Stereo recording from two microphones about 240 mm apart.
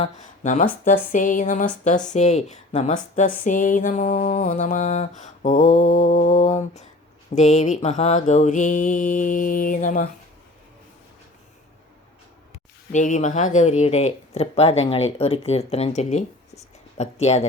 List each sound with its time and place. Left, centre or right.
0.0 s speech: left
12.9 s speech: left